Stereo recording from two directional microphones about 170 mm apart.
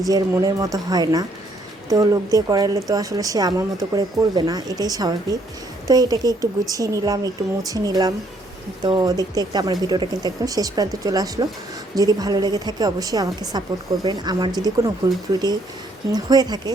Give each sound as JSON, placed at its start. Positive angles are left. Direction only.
{"t": 0.1, "sound": "speech", "side_deg": -20}